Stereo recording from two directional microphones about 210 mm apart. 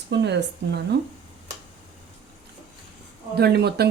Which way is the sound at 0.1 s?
55° right (ahead or behind).